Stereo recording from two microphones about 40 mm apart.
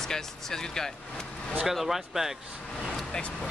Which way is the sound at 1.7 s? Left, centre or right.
Centre.